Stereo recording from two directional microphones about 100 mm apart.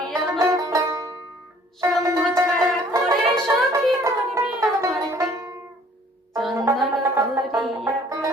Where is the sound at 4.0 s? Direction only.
30° right (ahead or behind).